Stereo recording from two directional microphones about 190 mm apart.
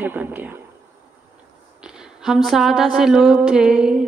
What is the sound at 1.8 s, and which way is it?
Speech, 5° right (ahead or behind).